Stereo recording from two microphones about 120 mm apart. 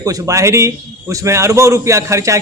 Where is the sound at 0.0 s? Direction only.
25° right (ahead or behind).